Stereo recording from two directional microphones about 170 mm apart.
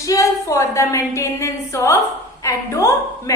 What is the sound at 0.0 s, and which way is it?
A woman's voice, 20° left (ahead or behind).